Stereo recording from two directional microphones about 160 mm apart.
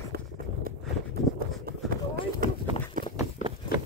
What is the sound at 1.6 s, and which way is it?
Run, 70° right (ahead or behind).